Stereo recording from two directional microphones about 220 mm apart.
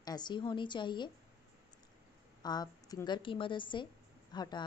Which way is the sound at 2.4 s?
20° left (ahead or behind).